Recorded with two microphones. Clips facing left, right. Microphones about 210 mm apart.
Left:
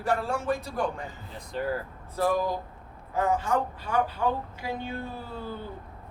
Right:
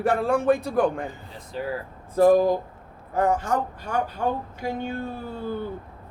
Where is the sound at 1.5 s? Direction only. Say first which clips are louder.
Even; centre (ahead or behind).